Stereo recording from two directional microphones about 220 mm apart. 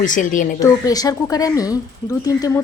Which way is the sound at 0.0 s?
35° left (ahead or behind).